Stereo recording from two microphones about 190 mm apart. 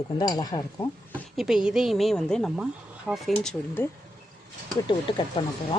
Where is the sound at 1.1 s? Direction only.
Centre (ahead or behind).